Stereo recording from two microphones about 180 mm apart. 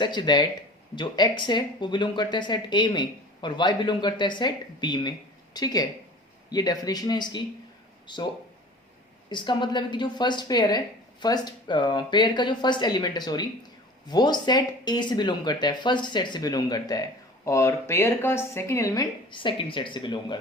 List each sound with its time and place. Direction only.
0.0 s speech: 25° left (ahead or behind)
9.3 s speech: 25° left (ahead or behind)